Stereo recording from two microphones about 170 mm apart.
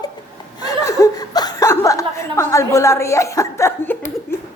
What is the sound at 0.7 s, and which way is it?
Chuckle, 20° left (ahead or behind).